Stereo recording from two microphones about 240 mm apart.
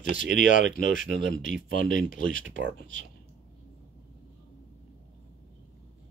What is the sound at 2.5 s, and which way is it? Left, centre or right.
Speech, right.